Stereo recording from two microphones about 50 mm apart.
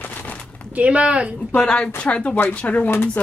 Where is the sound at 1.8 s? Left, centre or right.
Left.